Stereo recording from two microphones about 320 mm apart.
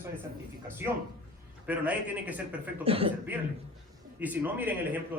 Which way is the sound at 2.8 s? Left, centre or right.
Centre.